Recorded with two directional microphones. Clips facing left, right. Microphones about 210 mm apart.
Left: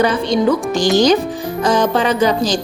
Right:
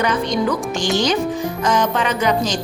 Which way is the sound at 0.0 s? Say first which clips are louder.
Left 4 dB; 30° left (ahead or behind).